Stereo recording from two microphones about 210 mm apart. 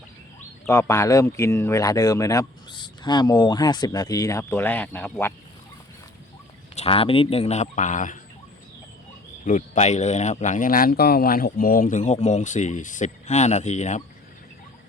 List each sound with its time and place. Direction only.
0.7 s speech: 15° left (ahead or behind)
6.7 s speech: 25° left (ahead or behind)
9.5 s speech: 35° left (ahead or behind)